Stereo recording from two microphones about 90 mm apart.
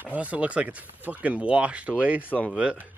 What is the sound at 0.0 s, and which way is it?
Speech, 15° right (ahead or behind).